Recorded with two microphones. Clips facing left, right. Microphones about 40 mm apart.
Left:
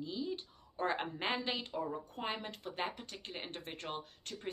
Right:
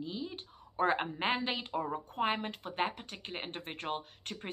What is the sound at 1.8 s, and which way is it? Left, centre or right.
A woman's voice, right.